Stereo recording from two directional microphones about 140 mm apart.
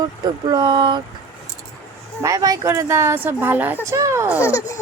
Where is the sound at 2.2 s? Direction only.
25° right (ahead or behind).